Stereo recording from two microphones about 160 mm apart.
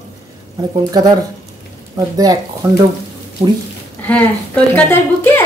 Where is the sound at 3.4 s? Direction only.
40° right (ahead or behind).